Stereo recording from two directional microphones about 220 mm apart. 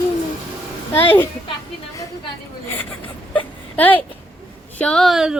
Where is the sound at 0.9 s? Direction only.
10° left (ahead or behind).